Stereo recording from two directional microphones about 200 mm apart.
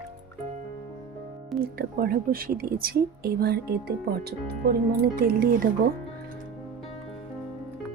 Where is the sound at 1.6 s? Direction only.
50° right (ahead or behind).